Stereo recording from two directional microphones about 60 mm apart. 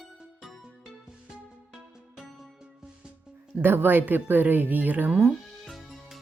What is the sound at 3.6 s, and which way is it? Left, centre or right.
Speech, right.